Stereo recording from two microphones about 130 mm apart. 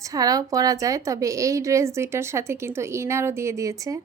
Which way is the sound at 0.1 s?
30° right (ahead or behind).